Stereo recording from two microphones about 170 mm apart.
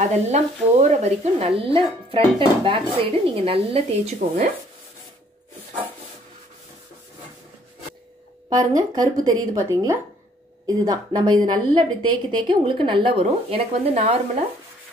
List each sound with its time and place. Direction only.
0.0 s speech: 40° right (ahead or behind)
8.5 s speech: 20° right (ahead or behind); by 14.1 s 40° right (ahead or behind)